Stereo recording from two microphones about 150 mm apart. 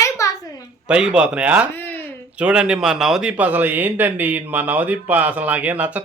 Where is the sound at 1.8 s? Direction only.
10° left (ahead or behind).